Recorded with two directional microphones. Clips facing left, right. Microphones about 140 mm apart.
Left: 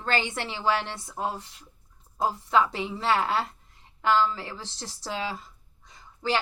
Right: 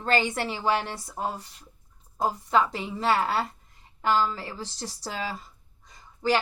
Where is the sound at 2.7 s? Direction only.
40° right (ahead or behind).